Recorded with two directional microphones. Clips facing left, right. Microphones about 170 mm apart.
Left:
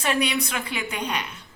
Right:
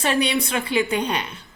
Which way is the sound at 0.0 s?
30° right (ahead or behind).